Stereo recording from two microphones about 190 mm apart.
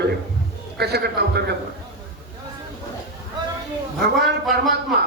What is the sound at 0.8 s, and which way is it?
Speech, 60° right (ahead or behind).